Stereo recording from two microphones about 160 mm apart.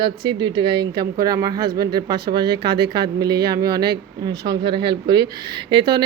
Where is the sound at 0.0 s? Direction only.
30° right (ahead or behind).